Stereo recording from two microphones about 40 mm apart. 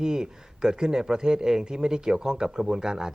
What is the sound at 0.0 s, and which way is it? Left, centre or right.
Speech, centre.